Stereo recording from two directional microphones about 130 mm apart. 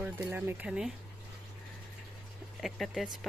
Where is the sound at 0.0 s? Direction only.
15° right (ahead or behind).